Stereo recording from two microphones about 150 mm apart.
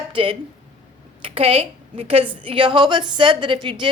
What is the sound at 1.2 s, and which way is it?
A woman's voice, 40° right (ahead or behind).